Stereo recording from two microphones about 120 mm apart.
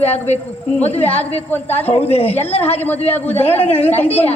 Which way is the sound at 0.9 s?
15° left (ahead or behind).